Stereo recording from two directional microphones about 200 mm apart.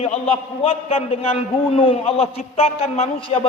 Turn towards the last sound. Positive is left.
turn(degrees=30)  # may be behind; listen again after turning